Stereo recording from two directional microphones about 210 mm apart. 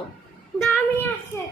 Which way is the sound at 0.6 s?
Centre (ahead or behind).